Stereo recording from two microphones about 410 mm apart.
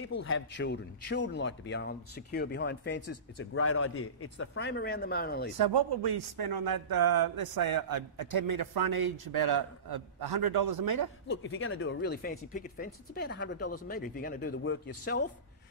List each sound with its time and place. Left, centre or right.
0.2 s speech: left
5.6 s speech: right
11.4 s speech: left
13.8 s speech: left